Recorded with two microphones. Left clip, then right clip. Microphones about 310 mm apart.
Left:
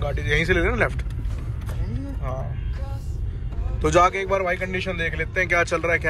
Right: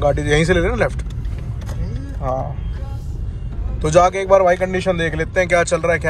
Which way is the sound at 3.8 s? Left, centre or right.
Centre.